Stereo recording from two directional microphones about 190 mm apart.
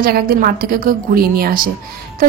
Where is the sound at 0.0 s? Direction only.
50° right (ahead or behind).